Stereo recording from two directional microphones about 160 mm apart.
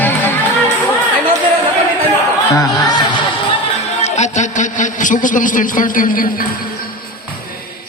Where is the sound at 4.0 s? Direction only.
45° left (ahead or behind).